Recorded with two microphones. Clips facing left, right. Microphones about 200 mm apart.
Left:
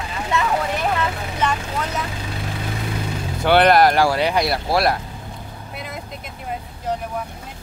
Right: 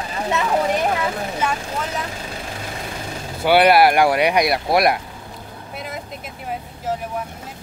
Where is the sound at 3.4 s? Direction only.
5° right (ahead or behind).